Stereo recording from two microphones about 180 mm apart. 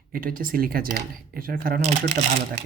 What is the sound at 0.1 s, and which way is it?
Speech, 50° right (ahead or behind).